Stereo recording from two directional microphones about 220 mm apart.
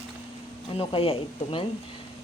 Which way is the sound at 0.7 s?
25° left (ahead or behind).